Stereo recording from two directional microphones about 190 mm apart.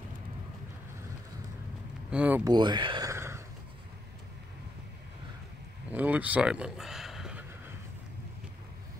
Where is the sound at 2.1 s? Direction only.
10° right (ahead or behind).